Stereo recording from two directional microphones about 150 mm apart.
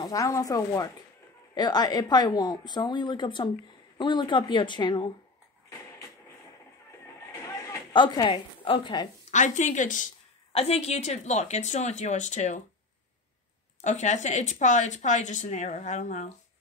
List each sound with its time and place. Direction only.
0.0 s a woman's voice: 20° left (ahead or behind)
7.4 s a woman's voice: 30° left (ahead or behind)
9.3 s speech: 55° left (ahead or behind)
10.5 s speech: 40° left (ahead or behind)
13.7 s speech: 50° left (ahead or behind)